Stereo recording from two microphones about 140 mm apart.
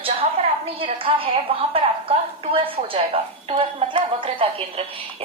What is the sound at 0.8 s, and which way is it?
A woman's voice, 40° right (ahead or behind).